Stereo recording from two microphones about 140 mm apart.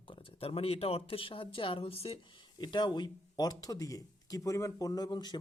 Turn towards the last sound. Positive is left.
turn(degrees=30)  # may be behind; listen again after turning